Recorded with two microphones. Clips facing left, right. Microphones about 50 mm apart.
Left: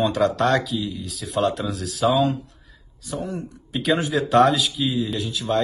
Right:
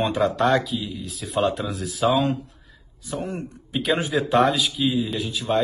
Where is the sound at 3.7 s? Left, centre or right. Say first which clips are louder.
Left 1 dB; centre.